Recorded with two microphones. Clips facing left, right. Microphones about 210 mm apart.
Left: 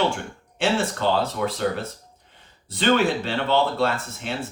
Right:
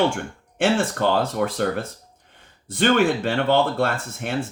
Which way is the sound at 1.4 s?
55° right (ahead or behind).